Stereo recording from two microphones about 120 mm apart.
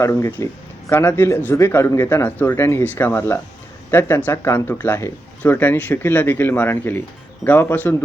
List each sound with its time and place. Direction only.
0.0 s speech: 20° left (ahead or behind)